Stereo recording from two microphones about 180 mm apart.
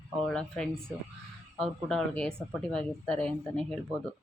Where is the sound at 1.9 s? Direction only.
5° left (ahead or behind).